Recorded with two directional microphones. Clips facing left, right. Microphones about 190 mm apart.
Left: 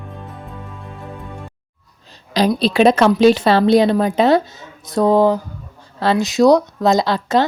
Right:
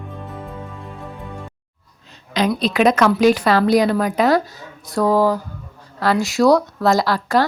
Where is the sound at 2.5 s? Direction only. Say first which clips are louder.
Left 3 dB; 30° left (ahead or behind).